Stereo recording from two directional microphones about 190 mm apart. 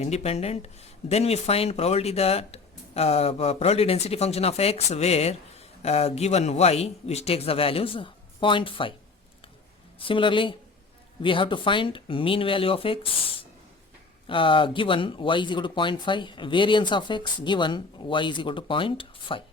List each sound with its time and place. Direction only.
0.0 s speech: 35° left (ahead or behind)
10.0 s speech: 25° left (ahead or behind)
14.3 s speech: 25° left (ahead or behind)